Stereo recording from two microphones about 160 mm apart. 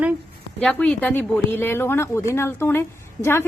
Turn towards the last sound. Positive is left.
turn(degrees=15)  # may be behind; listen again after turning